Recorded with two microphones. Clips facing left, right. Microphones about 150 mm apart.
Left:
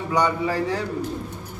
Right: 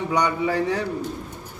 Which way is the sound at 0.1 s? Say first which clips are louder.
Left 1 dB; 20° right (ahead or behind).